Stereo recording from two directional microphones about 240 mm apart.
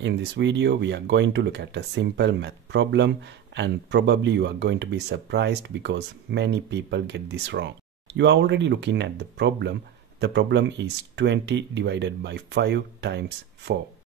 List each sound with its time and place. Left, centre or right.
0.0 s speech: right